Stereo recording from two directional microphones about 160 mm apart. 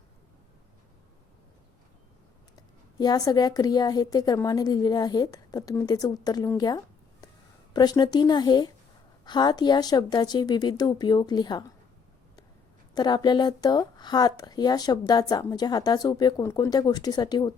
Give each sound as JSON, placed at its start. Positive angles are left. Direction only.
{"t": 2.6, "sound": "a woman's voice", "side_deg": 25}
{"t": 12.9, "sound": "a woman's voice", "side_deg": 25}